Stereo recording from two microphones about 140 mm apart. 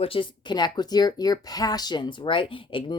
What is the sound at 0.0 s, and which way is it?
Speech, 40° left (ahead or behind).